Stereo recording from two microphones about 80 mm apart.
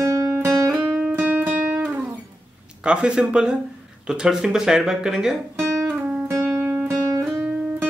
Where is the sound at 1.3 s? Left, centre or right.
Right.